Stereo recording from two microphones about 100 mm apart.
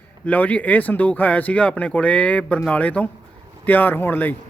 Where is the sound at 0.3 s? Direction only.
15° left (ahead or behind).